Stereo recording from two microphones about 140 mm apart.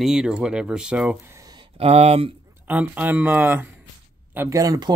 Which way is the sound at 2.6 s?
10° right (ahead or behind).